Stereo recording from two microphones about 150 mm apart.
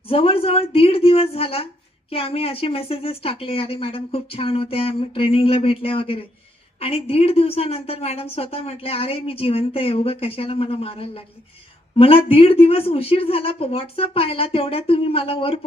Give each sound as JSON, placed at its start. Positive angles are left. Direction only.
{"t": 0.1, "sound": "a woman's voice", "side_deg": 40}